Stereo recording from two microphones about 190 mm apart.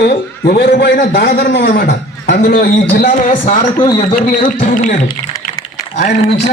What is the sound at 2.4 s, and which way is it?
A man's voice, 50° left (ahead or behind).